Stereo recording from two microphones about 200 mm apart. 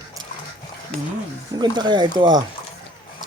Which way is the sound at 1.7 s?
20° right (ahead or behind).